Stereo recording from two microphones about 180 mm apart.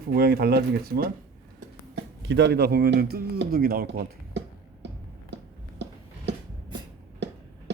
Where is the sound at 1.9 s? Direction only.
75° right (ahead or behind); by 4.4 s 55° right (ahead or behind).